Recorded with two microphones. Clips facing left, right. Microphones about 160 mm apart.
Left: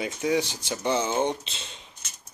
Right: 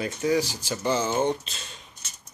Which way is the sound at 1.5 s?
25° left (ahead or behind).